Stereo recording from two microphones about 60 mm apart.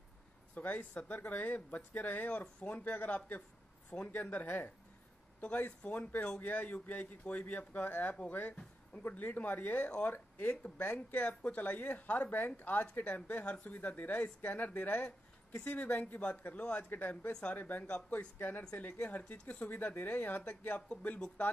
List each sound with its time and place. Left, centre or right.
0.6 s speech: left
10.1 s speech: left
10.5 s speech: left
17.3 s speech: centre
17.6 s speech: left